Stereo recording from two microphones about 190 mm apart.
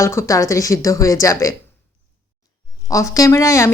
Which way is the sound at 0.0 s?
15° left (ahead or behind).